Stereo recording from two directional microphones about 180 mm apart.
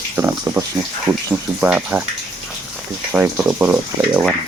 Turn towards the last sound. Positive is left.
turn(degrees=-10)  # may be behind; listen again after turning